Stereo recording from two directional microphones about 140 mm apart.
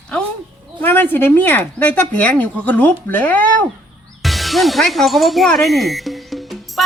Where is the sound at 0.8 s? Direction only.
15° left (ahead or behind).